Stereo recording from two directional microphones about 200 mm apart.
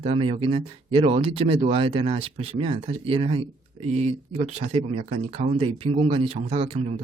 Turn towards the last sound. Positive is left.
turn(degrees=-30)  # may be behind; listen again after turning